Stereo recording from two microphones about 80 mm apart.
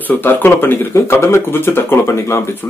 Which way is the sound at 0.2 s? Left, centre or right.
Left.